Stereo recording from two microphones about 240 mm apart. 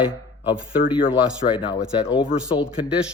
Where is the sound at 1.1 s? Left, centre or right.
Centre.